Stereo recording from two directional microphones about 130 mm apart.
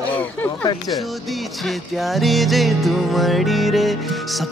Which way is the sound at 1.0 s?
Centre (ahead or behind).